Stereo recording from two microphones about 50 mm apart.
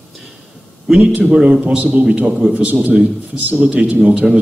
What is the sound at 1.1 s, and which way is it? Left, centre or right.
Speech, right.